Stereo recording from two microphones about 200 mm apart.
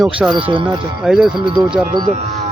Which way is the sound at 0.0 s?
Centre (ahead or behind).